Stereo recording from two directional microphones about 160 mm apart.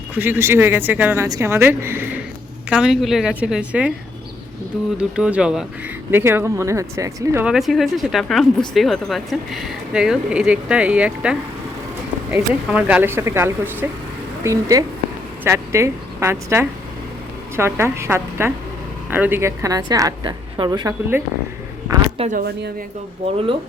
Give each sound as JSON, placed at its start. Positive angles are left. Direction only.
{"t": 0.1, "sound": "speech", "side_deg": -10}
{"t": 4.9, "sound": "speech", "side_deg": -5}
{"t": 7.4, "sound": "a woman's voice", "side_deg": 0}
{"t": 22.3, "sound": "speech", "side_deg": -75}